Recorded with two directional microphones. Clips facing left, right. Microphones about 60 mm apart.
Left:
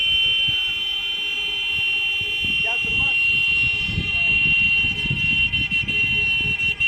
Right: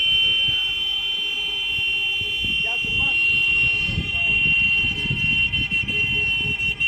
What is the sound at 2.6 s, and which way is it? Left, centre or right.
Vehicle, left.